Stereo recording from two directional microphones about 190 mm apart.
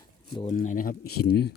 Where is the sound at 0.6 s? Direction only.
45° left (ahead or behind).